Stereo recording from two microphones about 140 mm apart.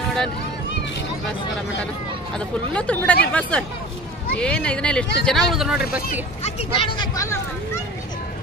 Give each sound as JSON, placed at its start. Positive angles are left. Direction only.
{"t": 2.3, "sound": "speech", "side_deg": 10}
{"t": 6.4, "sound": "speech", "side_deg": 40}